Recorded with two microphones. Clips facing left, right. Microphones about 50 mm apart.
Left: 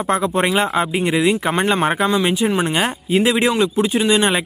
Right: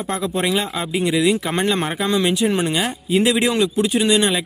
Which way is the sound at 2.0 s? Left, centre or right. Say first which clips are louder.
Left 1 dB; centre.